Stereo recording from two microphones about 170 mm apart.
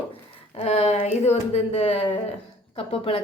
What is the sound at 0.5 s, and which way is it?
A woman's voice, 40° left (ahead or behind).